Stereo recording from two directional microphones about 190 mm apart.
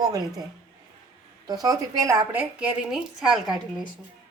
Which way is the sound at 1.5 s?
20° right (ahead or behind).